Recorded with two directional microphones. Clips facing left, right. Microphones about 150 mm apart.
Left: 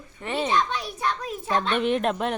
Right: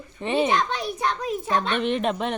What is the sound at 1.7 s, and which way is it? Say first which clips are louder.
Speech: even; 5° left (ahead or behind).